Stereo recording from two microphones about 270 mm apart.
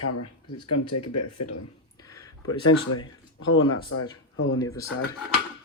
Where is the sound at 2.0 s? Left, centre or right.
Centre.